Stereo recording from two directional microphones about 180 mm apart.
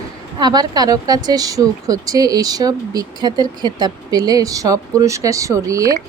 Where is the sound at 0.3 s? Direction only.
20° right (ahead or behind).